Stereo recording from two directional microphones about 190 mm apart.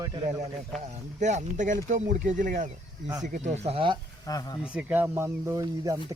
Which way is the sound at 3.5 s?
30° right (ahead or behind).